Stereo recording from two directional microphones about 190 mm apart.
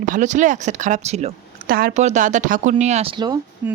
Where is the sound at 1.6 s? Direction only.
50° right (ahead or behind).